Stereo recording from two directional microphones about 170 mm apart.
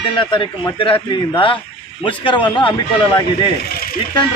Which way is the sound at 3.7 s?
60° left (ahead or behind).